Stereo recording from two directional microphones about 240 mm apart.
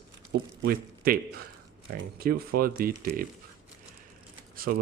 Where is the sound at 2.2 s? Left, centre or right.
Right.